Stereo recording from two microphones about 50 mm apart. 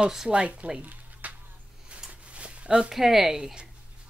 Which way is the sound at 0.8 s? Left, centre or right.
Right.